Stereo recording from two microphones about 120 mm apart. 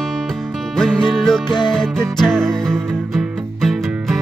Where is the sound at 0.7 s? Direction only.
5° left (ahead or behind).